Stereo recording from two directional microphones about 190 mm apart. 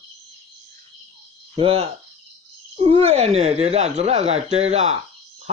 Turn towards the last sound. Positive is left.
turn(degrees=-35)  # may be behind; listen again after turning